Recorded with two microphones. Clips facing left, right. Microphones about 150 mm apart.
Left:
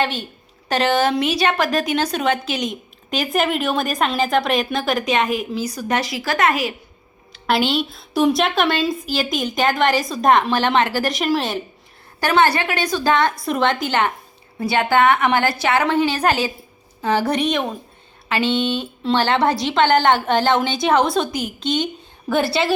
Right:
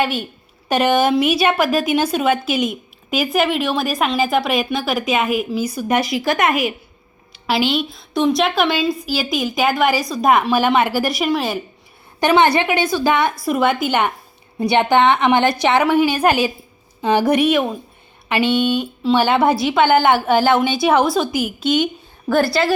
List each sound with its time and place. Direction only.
0.0 s a woman's voice: 10° right (ahead or behind)
7.3 s a woman's voice: 5° right (ahead or behind)
12.2 s a woman's voice: 15° right (ahead or behind); by 22.7 s centre (ahead or behind)